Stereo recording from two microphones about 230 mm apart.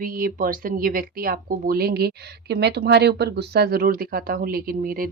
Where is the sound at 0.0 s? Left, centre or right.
Right.